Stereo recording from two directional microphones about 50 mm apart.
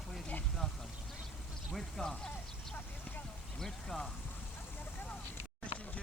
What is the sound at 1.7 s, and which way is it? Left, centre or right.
Speech, centre.